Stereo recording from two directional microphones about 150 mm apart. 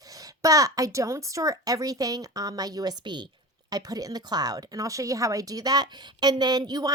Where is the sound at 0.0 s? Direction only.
25° right (ahead or behind).